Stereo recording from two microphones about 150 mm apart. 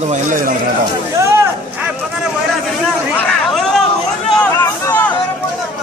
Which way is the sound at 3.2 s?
Centre (ahead or behind).